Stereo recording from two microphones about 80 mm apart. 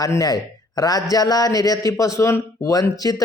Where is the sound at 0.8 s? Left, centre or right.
Left.